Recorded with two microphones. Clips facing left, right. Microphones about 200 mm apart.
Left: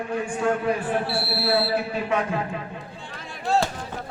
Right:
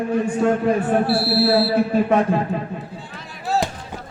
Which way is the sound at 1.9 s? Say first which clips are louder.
Right 8 dB; 40° right (ahead or behind).